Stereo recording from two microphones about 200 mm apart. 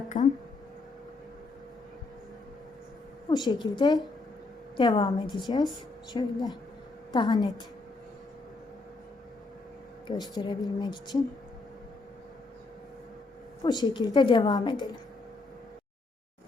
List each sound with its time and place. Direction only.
0.1 s speech: 35° left (ahead or behind)
3.2 s a woman's voice: 20° left (ahead or behind)
10.1 s a woman's voice: 20° left (ahead or behind)
13.6 s a woman's voice: 20° left (ahead or behind)